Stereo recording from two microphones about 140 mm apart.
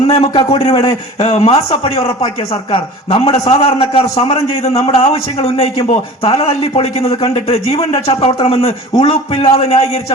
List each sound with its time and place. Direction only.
0.1 s a man's voice: 40° left (ahead or behind)